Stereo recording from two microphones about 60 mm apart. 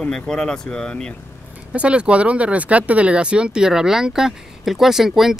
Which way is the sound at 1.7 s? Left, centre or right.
Centre.